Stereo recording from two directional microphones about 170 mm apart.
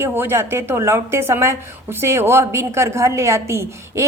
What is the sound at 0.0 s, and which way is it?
A woman's voice, 15° right (ahead or behind).